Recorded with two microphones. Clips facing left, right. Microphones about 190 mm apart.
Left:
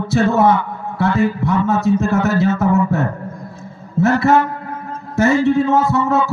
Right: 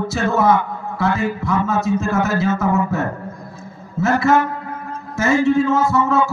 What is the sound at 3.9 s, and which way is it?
Speech, 60° left (ahead or behind).